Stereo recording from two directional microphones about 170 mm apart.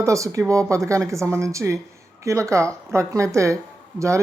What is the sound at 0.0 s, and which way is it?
Speech, 20° right (ahead or behind).